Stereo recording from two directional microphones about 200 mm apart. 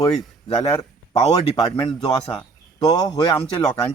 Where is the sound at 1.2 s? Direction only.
20° left (ahead or behind).